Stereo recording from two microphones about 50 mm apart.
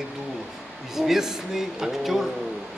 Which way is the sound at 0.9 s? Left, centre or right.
Centre.